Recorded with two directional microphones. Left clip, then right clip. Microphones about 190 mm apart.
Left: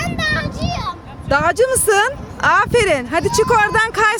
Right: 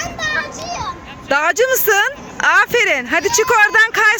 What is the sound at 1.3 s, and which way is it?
Speech, centre (ahead or behind).